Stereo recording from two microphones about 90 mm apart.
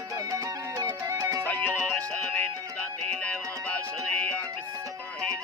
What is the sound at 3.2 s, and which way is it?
Music, 15° left (ahead or behind).